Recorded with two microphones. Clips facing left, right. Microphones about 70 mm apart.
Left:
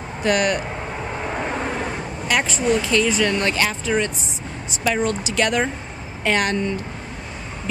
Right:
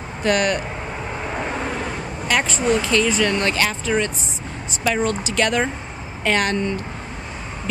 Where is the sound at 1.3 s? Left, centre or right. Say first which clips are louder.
Even; centre.